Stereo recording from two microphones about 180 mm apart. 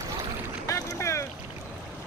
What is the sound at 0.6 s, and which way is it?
Boat, 15° left (ahead or behind).